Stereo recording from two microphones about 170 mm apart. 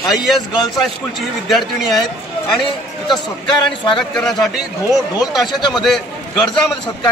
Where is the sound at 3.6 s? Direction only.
25° left (ahead or behind).